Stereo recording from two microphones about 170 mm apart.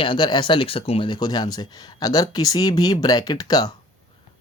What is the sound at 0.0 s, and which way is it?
Speech, 30° left (ahead or behind).